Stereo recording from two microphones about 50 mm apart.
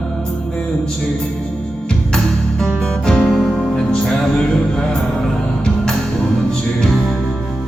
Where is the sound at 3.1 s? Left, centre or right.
Centre.